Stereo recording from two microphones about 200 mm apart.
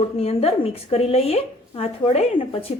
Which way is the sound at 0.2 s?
30° left (ahead or behind).